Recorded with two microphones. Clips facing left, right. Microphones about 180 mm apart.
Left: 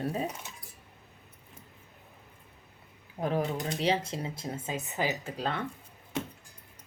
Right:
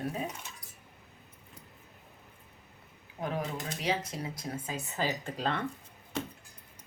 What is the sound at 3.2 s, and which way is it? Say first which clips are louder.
Speech: left 5 dB; 35° left (ahead or behind).